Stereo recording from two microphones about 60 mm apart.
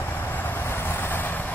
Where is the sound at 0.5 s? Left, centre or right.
Left.